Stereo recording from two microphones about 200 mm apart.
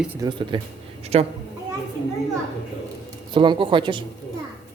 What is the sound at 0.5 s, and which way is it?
Speech, 25° right (ahead or behind).